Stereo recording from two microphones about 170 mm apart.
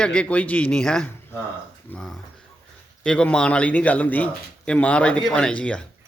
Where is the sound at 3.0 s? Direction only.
5° left (ahead or behind).